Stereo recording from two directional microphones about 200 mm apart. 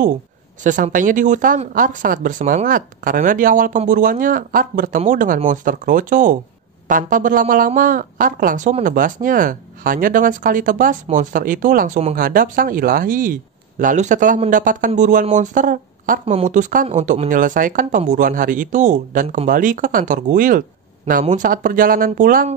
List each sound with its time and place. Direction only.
0.7 s speech: 40° right (ahead or behind)